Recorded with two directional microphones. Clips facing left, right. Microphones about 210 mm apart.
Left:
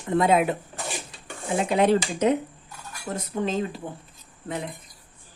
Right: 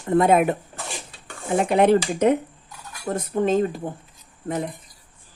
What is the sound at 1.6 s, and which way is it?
Speech, 55° right (ahead or behind).